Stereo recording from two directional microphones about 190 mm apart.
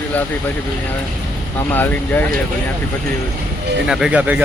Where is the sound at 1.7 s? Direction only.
10° left (ahead or behind).